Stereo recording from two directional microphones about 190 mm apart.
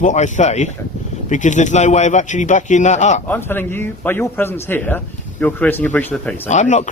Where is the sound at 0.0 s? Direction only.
40° left (ahead or behind).